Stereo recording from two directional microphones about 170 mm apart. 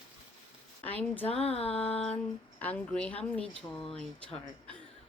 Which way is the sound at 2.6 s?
5° left (ahead or behind).